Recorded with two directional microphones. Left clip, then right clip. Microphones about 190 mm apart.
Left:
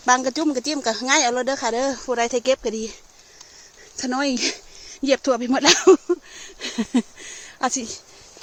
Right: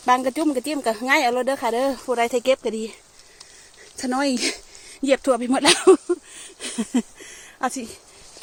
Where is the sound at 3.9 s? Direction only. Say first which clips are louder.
Even; 15° right (ahead or behind).